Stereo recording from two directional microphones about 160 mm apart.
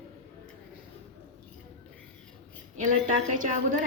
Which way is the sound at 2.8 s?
55° right (ahead or behind).